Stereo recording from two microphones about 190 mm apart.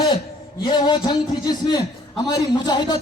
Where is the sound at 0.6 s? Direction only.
25° left (ahead or behind).